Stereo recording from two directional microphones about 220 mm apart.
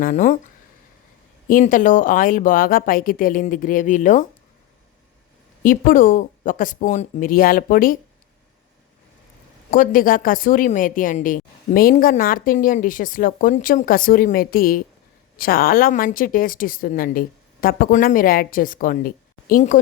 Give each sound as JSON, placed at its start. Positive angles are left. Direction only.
{"t": 0.0, "sound": "a woman's voice", "side_deg": 35}
{"t": 1.5, "sound": "a woman's voice", "side_deg": 40}
{"t": 5.6, "sound": "a woman's voice", "side_deg": 40}
{"t": 9.6, "sound": "a woman's voice", "side_deg": 40}